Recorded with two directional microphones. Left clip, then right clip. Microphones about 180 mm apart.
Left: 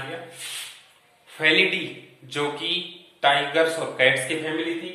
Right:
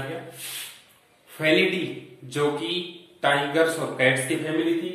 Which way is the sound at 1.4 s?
10° left (ahead or behind).